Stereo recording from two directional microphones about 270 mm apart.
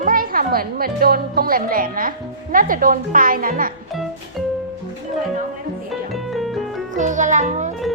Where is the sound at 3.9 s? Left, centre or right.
Centre.